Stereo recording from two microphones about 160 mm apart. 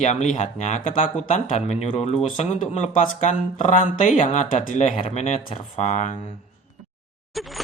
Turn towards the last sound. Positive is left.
turn(degrees=0)  # may be behind; listen again after turning